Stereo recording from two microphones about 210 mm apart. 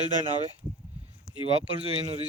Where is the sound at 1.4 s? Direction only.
30° right (ahead or behind).